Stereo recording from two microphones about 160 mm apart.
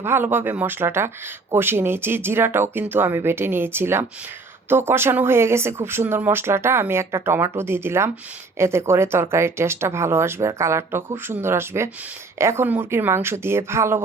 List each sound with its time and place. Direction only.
0.0 s speech: 15° right (ahead or behind)